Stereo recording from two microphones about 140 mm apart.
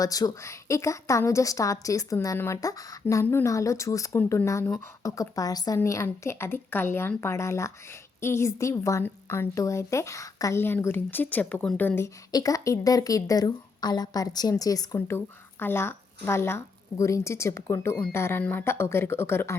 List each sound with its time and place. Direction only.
0.0 s a woman's voice: 25° left (ahead or behind)